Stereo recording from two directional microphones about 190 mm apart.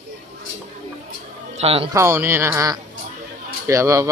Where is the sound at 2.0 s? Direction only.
15° right (ahead or behind).